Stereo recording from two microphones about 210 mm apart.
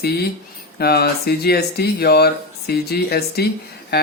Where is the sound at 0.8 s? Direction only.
50° left (ahead or behind).